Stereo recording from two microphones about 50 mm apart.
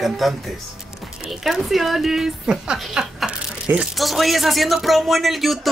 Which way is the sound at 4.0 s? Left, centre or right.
Centre.